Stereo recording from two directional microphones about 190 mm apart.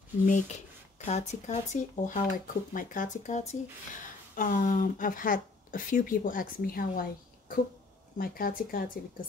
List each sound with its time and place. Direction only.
0.2 s speech: 40° left (ahead or behind)